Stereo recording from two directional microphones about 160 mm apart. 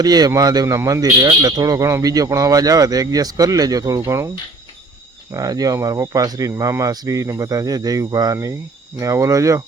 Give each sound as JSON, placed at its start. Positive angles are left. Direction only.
{"t": 0.0, "sound": "a man's voice", "side_deg": -25}
{"t": 5.3, "sound": "a man's voice", "side_deg": -20}